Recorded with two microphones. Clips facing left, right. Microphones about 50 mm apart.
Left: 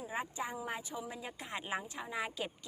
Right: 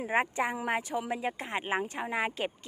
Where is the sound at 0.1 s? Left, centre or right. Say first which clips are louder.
Right 11 dB; right.